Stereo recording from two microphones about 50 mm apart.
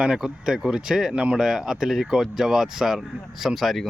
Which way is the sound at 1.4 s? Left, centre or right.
Centre.